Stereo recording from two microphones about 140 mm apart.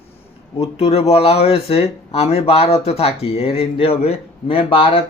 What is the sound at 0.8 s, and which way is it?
Speech, 45° left (ahead or behind).